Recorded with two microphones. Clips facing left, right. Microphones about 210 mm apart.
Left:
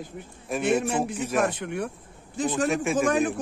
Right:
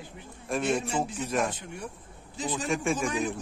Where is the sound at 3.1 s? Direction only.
55° left (ahead or behind).